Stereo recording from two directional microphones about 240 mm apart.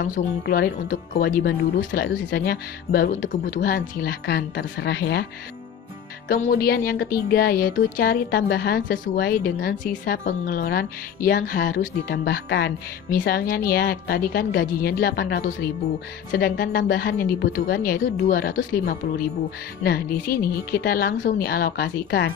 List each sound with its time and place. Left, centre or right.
0.0 s music: left
6.2 s music: left